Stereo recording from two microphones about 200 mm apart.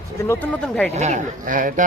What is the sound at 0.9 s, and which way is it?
Speech, 35° right (ahead or behind).